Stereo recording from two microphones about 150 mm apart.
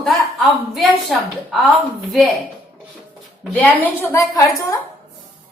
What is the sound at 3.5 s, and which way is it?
Speech, 10° left (ahead or behind).